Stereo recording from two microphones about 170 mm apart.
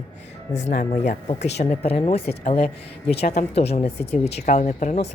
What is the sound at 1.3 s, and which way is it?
A woman's voice, 40° left (ahead or behind).